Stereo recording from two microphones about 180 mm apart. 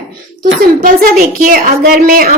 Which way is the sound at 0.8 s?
50° right (ahead or behind).